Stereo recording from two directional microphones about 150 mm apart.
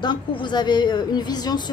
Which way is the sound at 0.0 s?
30° left (ahead or behind).